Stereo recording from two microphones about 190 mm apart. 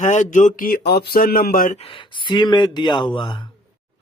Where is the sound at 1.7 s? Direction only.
30° left (ahead or behind).